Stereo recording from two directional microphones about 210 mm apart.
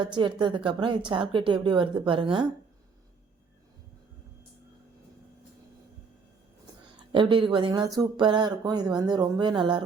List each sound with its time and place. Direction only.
0.0 s a woman's voice: 20° right (ahead or behind)
7.1 s a woman's voice: 25° right (ahead or behind)